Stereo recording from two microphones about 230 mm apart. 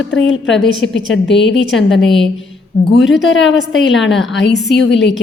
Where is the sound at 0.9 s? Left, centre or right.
Left.